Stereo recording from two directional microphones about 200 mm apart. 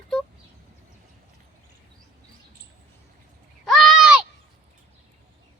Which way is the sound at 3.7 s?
Centre (ahead or behind).